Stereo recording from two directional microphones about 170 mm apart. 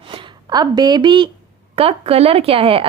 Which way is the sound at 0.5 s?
25° right (ahead or behind).